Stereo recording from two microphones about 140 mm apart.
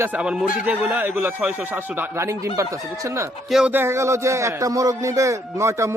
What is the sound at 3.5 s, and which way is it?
Speech, 5° right (ahead or behind).